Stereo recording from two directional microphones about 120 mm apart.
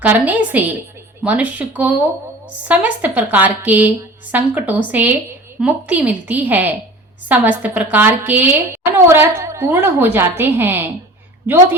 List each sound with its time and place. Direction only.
0.0 s a woman's voice: 15° right (ahead or behind)